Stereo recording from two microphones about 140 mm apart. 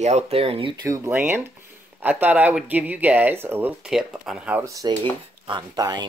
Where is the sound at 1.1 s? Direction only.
15° right (ahead or behind).